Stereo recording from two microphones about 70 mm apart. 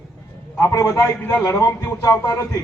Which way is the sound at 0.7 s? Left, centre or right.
Left.